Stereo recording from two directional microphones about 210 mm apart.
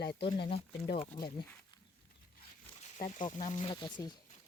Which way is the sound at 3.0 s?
35° left (ahead or behind).